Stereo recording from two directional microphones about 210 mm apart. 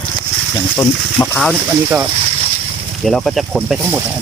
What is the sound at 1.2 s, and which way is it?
Speech, 15° left (ahead or behind).